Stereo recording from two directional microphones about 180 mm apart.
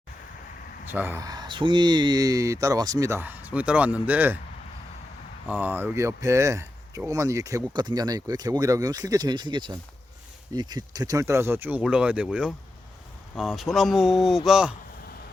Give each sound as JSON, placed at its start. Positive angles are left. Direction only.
{"t": 0.9, "sound": "speech", "side_deg": -10}
{"t": 5.5, "sound": "speech", "side_deg": -10}
{"t": 13.6, "sound": "speech", "side_deg": 0}